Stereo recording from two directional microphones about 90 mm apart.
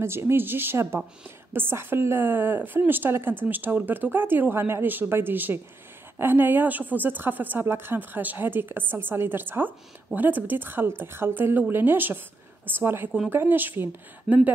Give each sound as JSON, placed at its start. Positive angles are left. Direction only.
{"t": 0.0, "sound": "a woman's voice", "side_deg": -30}
{"t": 14.3, "sound": "speech", "side_deg": 0}